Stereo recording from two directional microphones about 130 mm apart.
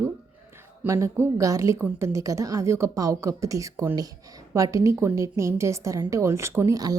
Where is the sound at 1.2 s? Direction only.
25° right (ahead or behind).